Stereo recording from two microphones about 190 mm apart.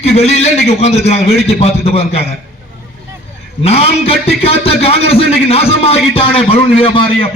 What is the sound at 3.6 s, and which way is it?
A man's voice, 30° left (ahead or behind).